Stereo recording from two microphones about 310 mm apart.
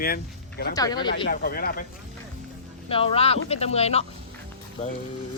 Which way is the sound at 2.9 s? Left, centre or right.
Centre.